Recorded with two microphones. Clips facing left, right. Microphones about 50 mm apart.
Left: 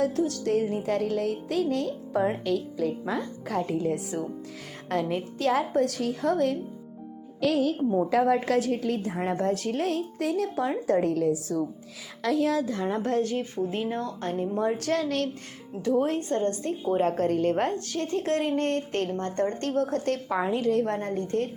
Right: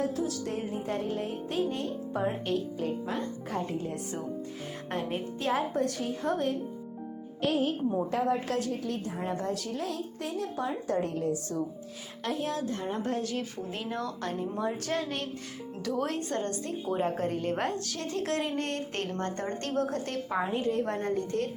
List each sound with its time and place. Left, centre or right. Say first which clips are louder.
0.0 s a woman's voice: left 5 dB; left
4.9 s a woman's voice: left 6 dB; left
7.4 s a woman's voice: left 4 dB; left
13.2 s speech: left 5 dB; left
14.3 s a woman's voice: left 7 dB; left
15.8 s a woman's voice: left 6 dB; left
16.8 s a woman's voice: left 6 dB; left
20.3 s a woman's voice: left 3 dB; left
20.8 s speech: left 2 dB; left